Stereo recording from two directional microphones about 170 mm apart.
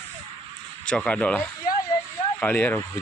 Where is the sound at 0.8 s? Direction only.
5° left (ahead or behind).